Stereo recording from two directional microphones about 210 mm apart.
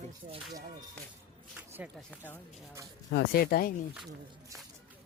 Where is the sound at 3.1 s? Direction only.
50° left (ahead or behind).